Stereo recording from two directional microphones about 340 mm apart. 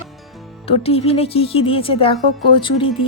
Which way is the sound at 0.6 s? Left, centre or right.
Centre.